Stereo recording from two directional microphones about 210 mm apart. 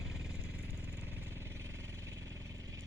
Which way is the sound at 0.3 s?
10° right (ahead or behind).